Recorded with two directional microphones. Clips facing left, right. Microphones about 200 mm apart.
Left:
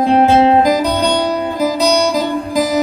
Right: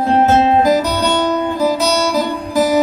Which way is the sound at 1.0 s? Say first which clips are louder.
Left 1 dB; 15° left (ahead or behind).